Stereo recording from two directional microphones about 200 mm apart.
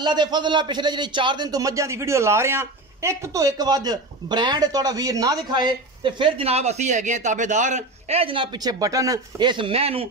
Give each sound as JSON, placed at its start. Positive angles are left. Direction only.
{"t": 0.0, "sound": "a man's voice", "side_deg": -20}